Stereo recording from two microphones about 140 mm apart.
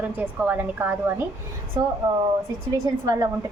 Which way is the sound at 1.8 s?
30° right (ahead or behind).